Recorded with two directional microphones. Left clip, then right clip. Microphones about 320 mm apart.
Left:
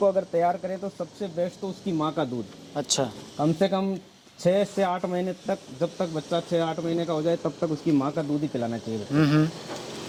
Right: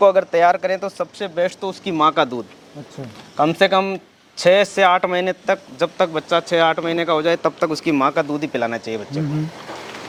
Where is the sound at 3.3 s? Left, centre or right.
Centre.